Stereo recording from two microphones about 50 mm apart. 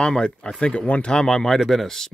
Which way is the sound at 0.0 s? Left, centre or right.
Centre.